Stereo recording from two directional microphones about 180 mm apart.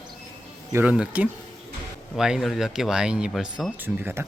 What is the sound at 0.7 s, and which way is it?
Speech, 5° right (ahead or behind).